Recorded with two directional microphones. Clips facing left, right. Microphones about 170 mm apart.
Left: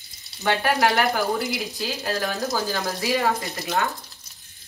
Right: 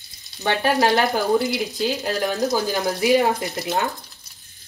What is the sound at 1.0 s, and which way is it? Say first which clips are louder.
Speech: right 4 dB; 20° right (ahead or behind).